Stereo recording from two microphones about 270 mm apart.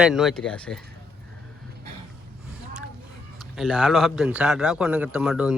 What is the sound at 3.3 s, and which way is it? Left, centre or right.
Speech, centre.